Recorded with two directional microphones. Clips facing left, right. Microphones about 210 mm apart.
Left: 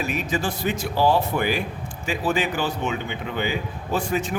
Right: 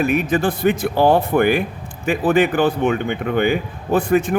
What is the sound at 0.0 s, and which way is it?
A man's voice, 55° right (ahead or behind).